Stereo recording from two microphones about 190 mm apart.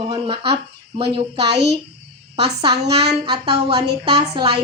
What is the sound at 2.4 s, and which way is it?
Speech, 30° right (ahead or behind).